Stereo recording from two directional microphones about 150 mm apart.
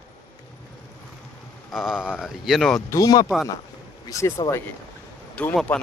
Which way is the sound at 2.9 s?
25° left (ahead or behind).